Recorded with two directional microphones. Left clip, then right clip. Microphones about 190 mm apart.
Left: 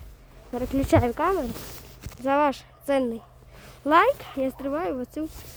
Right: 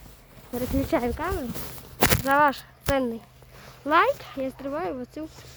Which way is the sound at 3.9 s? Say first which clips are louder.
Left 2 dB; 45° left (ahead or behind).